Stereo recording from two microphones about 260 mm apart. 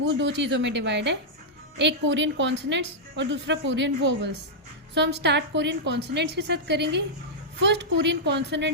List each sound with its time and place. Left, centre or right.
0.0 s a woman's voice: right